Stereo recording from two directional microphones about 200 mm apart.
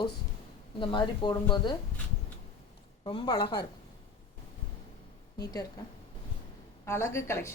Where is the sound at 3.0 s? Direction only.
25° left (ahead or behind).